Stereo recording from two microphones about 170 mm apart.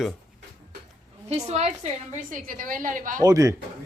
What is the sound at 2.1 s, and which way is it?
A woman's voice, 50° right (ahead or behind).